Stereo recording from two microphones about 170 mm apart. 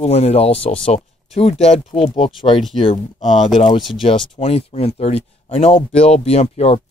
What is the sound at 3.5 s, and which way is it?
Speech, 30° left (ahead or behind).